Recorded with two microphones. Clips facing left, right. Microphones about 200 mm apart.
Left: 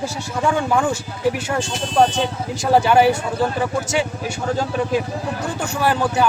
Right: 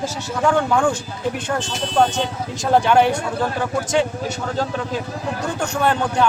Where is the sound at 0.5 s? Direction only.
10° left (ahead or behind).